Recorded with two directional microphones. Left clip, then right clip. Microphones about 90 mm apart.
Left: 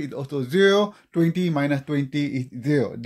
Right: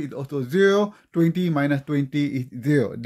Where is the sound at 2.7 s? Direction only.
50° right (ahead or behind).